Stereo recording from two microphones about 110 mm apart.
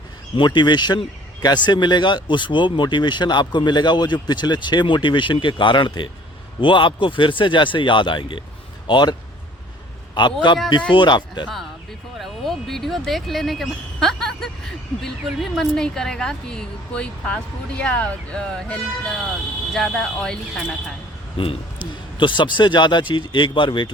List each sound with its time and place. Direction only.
0.3 s speech: 45° left (ahead or behind)
10.4 s speech: 45° left (ahead or behind)
12.2 s a sound: 5° left (ahead or behind)
15.5 s speech: 5° left (ahead or behind)
21.4 s a man's voice: 55° left (ahead or behind)